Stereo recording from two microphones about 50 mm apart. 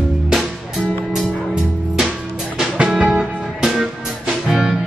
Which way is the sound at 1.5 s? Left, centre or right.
Centre.